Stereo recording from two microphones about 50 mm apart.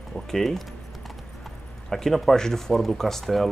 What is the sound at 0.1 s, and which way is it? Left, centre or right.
Speech, centre.